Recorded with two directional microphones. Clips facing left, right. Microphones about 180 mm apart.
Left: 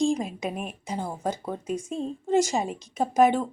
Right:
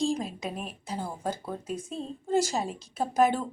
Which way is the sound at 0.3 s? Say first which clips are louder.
Left 4 dB; centre (ahead or behind).